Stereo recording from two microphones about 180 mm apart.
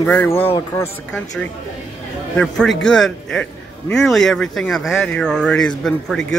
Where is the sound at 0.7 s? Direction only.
10° left (ahead or behind).